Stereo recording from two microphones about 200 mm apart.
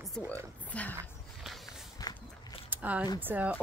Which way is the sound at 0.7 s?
5° left (ahead or behind).